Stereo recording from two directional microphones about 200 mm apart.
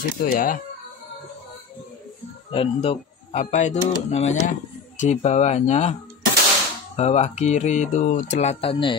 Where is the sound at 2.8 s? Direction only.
35° left (ahead or behind).